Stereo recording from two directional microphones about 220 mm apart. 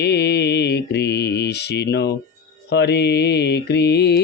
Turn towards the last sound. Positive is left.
turn(degrees=50)  # may be behind; listen again after turning